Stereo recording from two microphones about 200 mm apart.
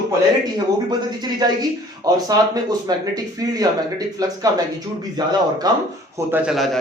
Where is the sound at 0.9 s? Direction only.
20° right (ahead or behind).